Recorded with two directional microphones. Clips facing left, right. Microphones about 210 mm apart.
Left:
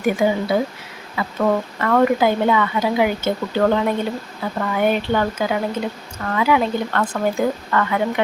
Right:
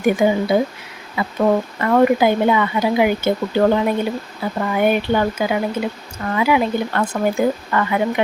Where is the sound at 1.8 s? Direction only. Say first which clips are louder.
Right 2 dB; 15° right (ahead or behind).